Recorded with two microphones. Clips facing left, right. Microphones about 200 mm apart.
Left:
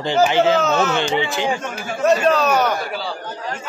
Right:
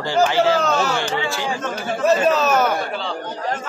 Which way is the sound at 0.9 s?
20° left (ahead or behind).